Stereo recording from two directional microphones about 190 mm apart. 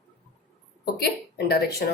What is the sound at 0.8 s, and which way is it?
A woman's voice, 55° left (ahead or behind).